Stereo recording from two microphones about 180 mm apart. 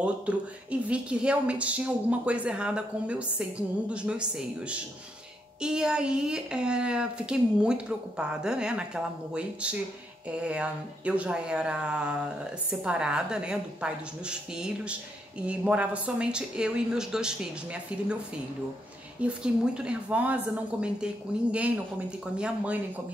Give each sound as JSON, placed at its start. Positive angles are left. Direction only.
{"t": 0.7, "sound": "a woman's voice", "side_deg": -5}
{"t": 19.2, "sound": "a woman's voice", "side_deg": -5}